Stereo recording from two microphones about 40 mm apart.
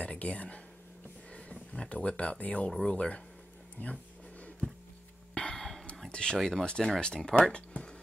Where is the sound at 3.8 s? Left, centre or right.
Left.